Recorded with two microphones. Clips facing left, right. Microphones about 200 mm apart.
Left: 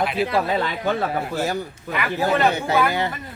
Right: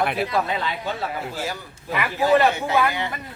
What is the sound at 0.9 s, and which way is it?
Speech, 50° left (ahead or behind).